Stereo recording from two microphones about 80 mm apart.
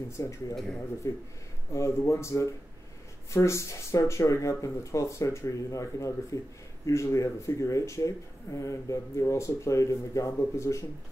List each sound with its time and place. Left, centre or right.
0.2 s speech: left